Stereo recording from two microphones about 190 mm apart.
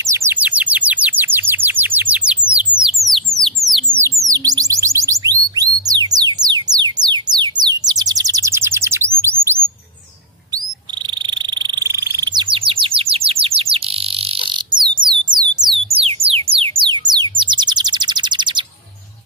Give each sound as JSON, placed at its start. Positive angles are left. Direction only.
{"t": 0.0, "sound": "bird", "side_deg": -15}
{"t": 3.3, "sound": "a sound", "side_deg": 0}
{"t": 4.3, "sound": "chirp tone", "side_deg": -20}
{"t": 9.2, "sound": "bird", "side_deg": -15}
{"t": 11.2, "sound": "frog", "side_deg": -25}
{"t": 14.7, "sound": "a sound", "side_deg": -25}
{"t": 17.1, "sound": "bird", "side_deg": -25}